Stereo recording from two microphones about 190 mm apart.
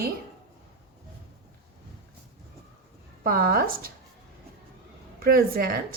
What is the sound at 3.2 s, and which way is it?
Speech, 50° right (ahead or behind).